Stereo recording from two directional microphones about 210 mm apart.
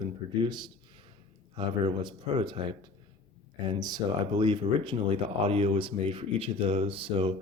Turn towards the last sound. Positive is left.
turn(degrees=-25)  # may be behind; listen again after turning